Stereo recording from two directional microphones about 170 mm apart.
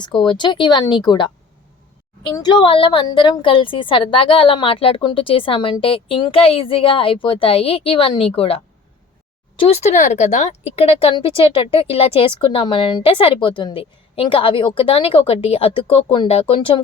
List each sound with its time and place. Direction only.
0.0 s speech: 30° left (ahead or behind)
2.3 s a woman's voice: 25° left (ahead or behind)